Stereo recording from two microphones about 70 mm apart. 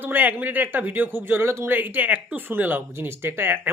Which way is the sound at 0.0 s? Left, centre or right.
Right.